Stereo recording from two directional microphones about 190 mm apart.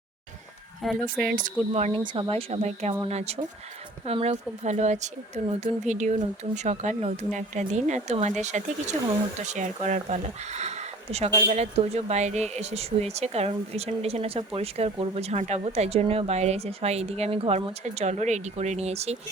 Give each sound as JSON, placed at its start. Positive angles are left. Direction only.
{"t": 0.8, "sound": "speech", "side_deg": 0}
{"t": 1.3, "sound": "speech", "side_deg": -45}